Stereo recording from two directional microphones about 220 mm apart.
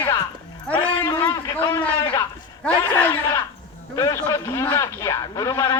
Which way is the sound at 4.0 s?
15° left (ahead or behind).